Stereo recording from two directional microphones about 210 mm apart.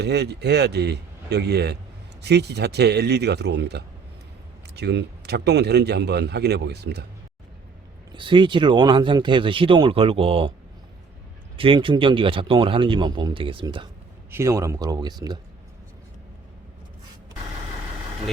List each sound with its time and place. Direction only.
0.0 s speech: 50° right (ahead or behind)
8.1 s speech: 25° right (ahead or behind)
11.5 s speech: 25° right (ahead or behind)
14.3 s speech: 15° right (ahead or behind)